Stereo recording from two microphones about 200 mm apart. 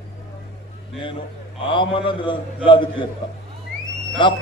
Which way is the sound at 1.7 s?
25° left (ahead or behind).